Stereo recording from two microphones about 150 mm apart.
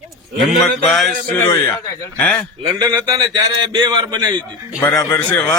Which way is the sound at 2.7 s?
25° right (ahead or behind).